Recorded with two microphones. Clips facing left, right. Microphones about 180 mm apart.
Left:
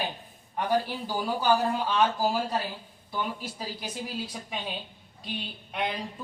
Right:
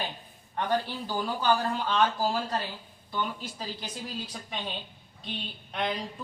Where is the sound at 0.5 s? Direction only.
10° left (ahead or behind).